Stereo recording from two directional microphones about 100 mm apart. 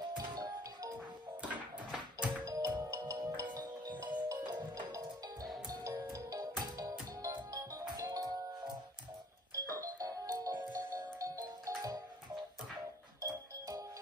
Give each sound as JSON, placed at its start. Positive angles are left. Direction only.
{"t": 0.2, "sound": "music", "side_deg": -40}
{"t": 1.9, "sound": "a sound", "side_deg": -10}
{"t": 2.4, "sound": "music", "side_deg": -35}
{"t": 9.6, "sound": "music", "side_deg": -35}
{"t": 10.8, "sound": "music", "side_deg": -20}
{"t": 13.2, "sound": "music", "side_deg": -30}